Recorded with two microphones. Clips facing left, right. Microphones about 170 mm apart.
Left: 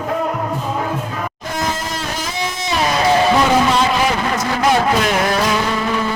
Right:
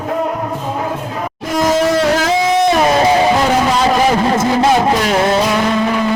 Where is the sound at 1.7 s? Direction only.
80° right.